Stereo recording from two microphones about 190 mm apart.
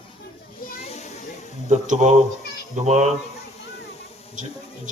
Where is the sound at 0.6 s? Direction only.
35° left (ahead or behind).